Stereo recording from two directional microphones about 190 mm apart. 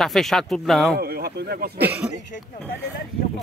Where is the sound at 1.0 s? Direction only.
55° right (ahead or behind).